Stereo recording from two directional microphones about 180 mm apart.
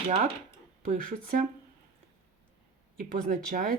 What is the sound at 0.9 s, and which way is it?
Speech, 50° right (ahead or behind).